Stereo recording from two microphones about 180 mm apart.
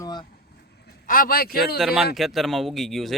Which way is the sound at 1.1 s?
55° left (ahead or behind).